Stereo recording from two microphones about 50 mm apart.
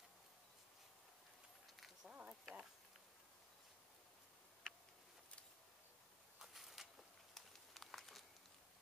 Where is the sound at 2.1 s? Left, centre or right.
Right.